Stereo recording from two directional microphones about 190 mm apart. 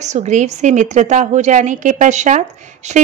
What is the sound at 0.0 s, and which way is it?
A woman's voice, 40° right (ahead or behind).